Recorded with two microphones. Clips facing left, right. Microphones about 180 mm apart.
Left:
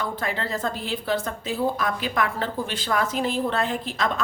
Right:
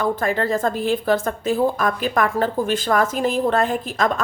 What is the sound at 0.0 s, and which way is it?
A woman's voice, 50° right (ahead or behind).